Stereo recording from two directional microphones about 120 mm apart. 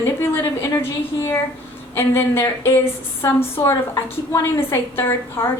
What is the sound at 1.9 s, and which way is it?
A woman's voice, 20° left (ahead or behind).